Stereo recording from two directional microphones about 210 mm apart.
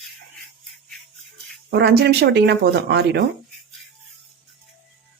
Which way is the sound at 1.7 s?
50° right (ahead or behind).